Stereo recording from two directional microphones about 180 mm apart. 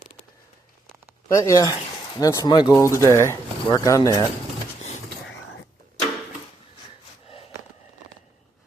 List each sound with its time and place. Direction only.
1.3 s speech: 15° left (ahead or behind)